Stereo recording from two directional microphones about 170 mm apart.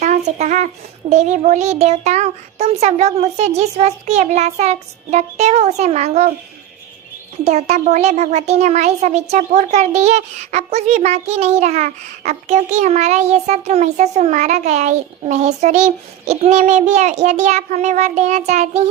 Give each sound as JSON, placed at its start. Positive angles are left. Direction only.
{"t": 0.0, "sound": "a sound", "side_deg": -45}
{"t": 1.1, "sound": "a child's voice", "side_deg": -45}
{"t": 7.4, "sound": "a child's voice", "side_deg": -40}